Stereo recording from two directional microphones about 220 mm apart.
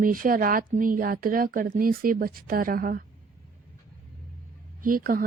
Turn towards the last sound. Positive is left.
turn(degrees=-40)  # may be behind; listen again after turning